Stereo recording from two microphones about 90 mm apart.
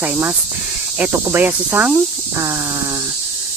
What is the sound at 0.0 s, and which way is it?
Cricket, 20° right (ahead or behind).